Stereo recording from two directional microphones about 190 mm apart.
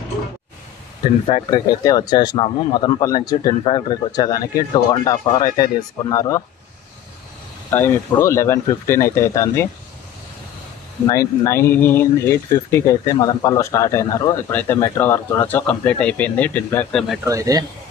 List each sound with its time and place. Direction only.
1.0 s speech: 25° left (ahead or behind)
7.7 s speech: 10° left (ahead or behind)
11.1 s speech: 15° left (ahead or behind)
17.2 s speech: 15° right (ahead or behind)